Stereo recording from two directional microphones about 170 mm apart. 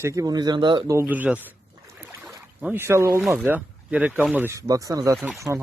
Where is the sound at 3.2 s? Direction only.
5° right (ahead or behind); by 5.2 s 20° right (ahead or behind).